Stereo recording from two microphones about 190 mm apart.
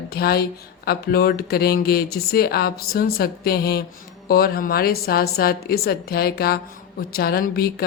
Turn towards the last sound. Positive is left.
turn(degrees=55)  # may be behind; listen again after turning